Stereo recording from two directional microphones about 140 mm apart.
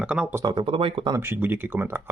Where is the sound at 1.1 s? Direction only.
15° right (ahead or behind).